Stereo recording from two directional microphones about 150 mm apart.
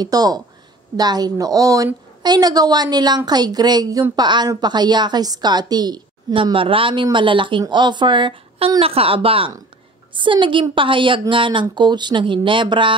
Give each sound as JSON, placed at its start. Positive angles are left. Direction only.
{"t": 0.0, "sound": "a woman's voice", "side_deg": -25}